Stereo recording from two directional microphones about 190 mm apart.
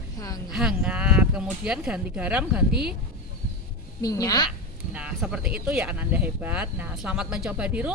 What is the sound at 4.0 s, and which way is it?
Speech, 20° left (ahead or behind).